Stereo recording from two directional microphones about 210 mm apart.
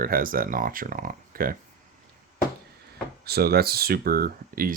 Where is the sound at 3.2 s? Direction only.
50° right (ahead or behind).